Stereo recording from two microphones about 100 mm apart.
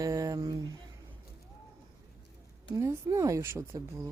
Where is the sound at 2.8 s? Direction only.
30° right (ahead or behind).